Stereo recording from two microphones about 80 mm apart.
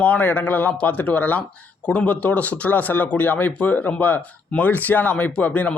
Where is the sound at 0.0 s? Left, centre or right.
Centre.